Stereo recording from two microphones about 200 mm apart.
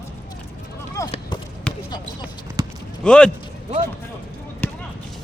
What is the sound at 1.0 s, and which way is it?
Run, 15° left (ahead or behind).